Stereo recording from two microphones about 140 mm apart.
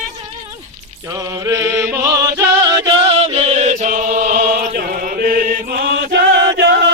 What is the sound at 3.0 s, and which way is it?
Music, 40° right (ahead or behind).